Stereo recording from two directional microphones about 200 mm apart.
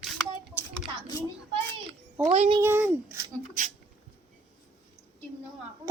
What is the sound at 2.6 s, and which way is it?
Speech, 10° right (ahead or behind).